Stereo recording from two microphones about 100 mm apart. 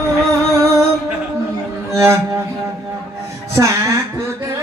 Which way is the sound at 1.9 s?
30° right (ahead or behind).